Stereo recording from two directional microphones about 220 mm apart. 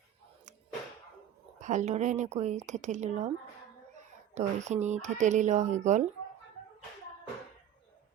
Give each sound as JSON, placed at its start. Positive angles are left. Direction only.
{"t": 1.5, "sound": "speech", "side_deg": -35}
{"t": 4.4, "sound": "speech", "side_deg": -30}